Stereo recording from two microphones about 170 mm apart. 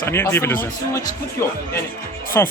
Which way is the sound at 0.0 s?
15° left (ahead or behind).